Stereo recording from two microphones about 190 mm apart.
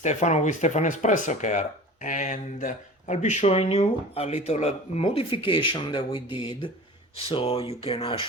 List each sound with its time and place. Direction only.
0.0 s speech: 40° left (ahead or behind)